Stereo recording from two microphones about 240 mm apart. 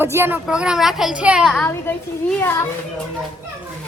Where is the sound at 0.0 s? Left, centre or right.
Centre.